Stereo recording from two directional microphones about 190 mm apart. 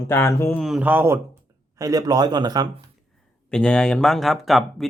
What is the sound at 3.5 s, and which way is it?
Speech, 5° left (ahead or behind).